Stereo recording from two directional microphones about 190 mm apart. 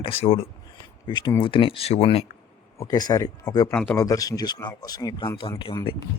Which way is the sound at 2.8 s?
20° left (ahead or behind).